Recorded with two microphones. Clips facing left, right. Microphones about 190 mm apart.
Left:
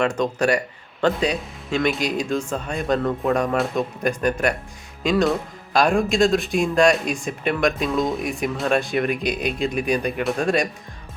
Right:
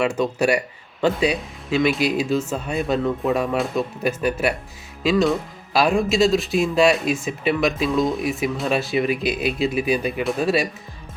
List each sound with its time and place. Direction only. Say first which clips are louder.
0.0 s speech: right 1 dB; 5° right (ahead or behind)